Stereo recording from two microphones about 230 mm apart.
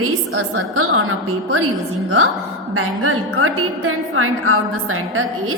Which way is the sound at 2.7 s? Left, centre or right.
Right.